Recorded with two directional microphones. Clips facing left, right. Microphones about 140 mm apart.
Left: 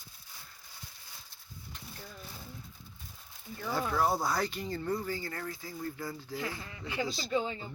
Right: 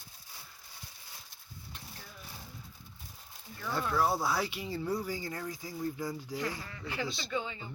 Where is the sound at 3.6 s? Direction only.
Centre (ahead or behind).